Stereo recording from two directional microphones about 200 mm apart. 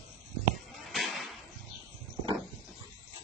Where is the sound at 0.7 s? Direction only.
Centre (ahead or behind).